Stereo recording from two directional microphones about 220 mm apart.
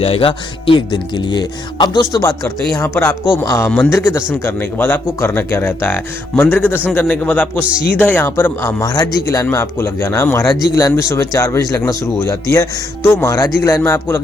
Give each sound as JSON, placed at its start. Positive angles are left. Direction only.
{"t": 0.0, "sound": "speech", "side_deg": 25}
{"t": 7.6, "sound": "speech", "side_deg": -5}
{"t": 7.9, "sound": "speech", "side_deg": 10}